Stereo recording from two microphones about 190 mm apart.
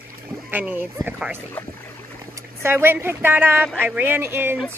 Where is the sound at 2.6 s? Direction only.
10° right (ahead or behind).